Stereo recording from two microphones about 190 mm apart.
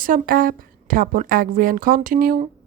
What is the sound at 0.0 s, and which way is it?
A woman's voice, 45° right (ahead or behind).